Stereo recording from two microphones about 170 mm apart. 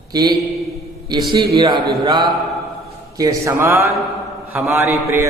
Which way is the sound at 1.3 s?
25° right (ahead or behind).